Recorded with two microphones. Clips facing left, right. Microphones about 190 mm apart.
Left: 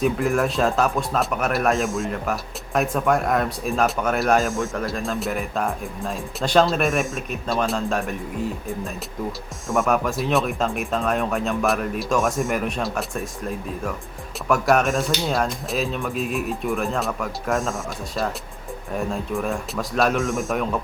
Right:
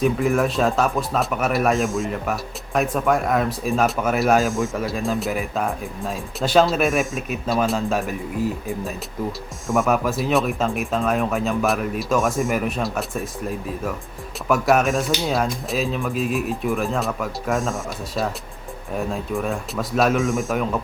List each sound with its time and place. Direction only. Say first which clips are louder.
0.0 s speech: right 1 dB; centre (ahead or behind)
9.6 s speech: right 1 dB; centre (ahead or behind)